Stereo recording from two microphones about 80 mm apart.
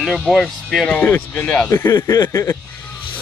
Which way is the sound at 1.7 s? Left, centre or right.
Left.